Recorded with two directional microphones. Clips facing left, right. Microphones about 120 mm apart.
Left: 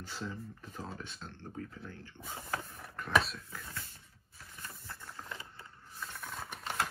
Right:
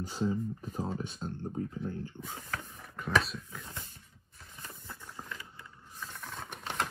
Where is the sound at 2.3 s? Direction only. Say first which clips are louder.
Left 3 dB; 10° left (ahead or behind).